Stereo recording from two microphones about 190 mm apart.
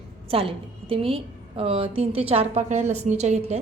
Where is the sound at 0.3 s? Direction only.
30° right (ahead or behind).